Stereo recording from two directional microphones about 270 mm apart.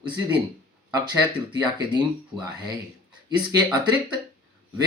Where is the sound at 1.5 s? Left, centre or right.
Centre.